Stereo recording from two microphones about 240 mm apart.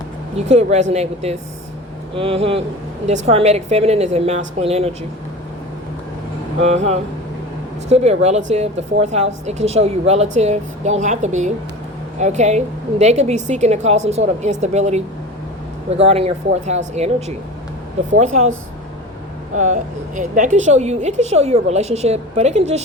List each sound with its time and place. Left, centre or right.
0.3 s a woman's voice: right
6.6 s a woman's voice: right
18.3 s a woman's voice: right
19.5 s a woman's voice: right